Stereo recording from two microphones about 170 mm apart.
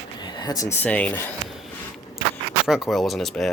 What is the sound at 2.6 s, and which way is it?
Speech, centre (ahead or behind).